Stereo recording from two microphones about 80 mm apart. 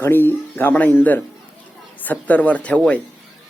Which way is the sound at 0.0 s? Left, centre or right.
Left.